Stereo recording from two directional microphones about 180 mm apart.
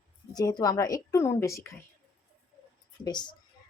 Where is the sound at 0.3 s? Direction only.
20° left (ahead or behind).